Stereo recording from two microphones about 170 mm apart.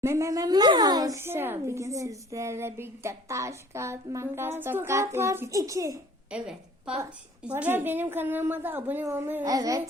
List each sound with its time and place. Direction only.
0.0 s speech: 15° right (ahead or behind)
6.3 s a woman's voice: 5° right (ahead or behind)